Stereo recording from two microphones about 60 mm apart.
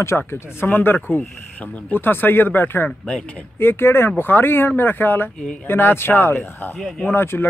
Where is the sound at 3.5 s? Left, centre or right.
Left.